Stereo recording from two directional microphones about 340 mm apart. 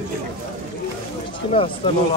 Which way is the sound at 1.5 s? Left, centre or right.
Centre.